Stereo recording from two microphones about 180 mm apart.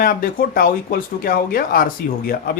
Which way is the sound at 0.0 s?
55° left (ahead or behind).